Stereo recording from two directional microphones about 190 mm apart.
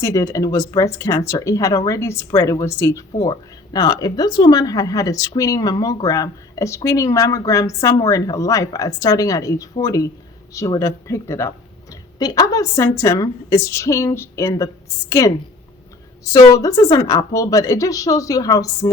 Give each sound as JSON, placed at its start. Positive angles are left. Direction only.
{"t": 0.0, "sound": "speech", "side_deg": 15}
{"t": 16.3, "sound": "speech", "side_deg": 20}